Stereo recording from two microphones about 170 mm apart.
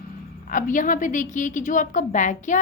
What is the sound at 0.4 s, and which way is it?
A woman's voice, 50° left (ahead or behind).